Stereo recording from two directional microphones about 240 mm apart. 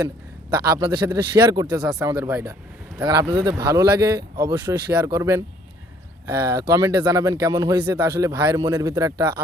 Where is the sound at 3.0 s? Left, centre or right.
Centre.